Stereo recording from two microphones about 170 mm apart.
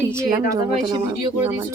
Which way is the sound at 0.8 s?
25° right (ahead or behind).